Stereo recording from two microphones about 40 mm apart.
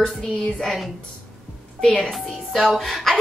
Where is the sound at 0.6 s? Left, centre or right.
Centre.